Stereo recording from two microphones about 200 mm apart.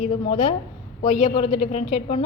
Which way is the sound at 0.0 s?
30° left (ahead or behind).